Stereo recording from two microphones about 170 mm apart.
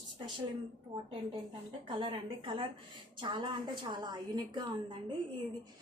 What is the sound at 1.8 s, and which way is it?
Speech, 30° right (ahead or behind).